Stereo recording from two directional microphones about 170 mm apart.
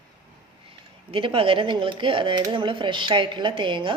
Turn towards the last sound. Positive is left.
turn(degrees=-30)  # may be behind; listen again after turning